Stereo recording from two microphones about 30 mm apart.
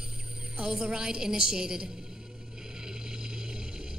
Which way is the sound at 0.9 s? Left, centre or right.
Right.